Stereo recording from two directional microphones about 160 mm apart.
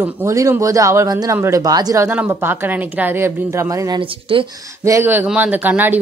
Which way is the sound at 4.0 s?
35° right (ahead or behind).